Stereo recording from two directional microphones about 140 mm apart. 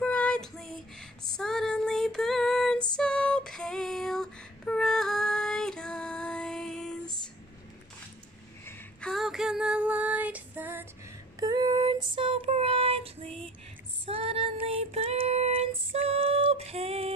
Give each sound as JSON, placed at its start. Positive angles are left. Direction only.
{"t": 0.0, "sound": "female singing", "side_deg": 10}
{"t": 9.1, "sound": "female singing", "side_deg": 0}
{"t": 11.3, "sound": "female singing", "side_deg": -25}
{"t": 12.4, "sound": "child singing", "side_deg": -45}